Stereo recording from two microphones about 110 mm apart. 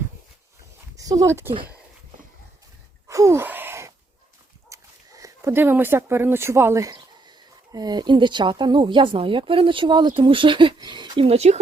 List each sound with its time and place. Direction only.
0.9 s speech: 30° right (ahead or behind)
3.1 s gasp: 25° right (ahead or behind)
4.7 s speech: 30° right (ahead or behind)
6.9 s speech: 40° right (ahead or behind); by 11.6 s 75° right (ahead or behind)